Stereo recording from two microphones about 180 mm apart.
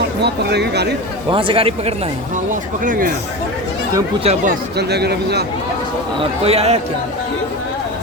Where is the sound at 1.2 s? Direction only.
30° right (ahead or behind).